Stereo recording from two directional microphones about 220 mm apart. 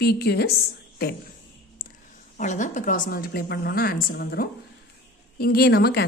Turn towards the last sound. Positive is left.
turn(degrees=45)  # may be behind; listen again after turning